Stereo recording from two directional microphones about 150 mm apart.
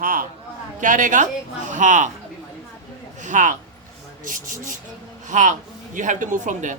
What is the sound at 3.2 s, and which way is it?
A man's voice, 60° right (ahead or behind).